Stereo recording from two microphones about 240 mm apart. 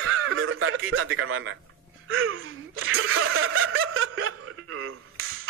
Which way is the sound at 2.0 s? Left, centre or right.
Right.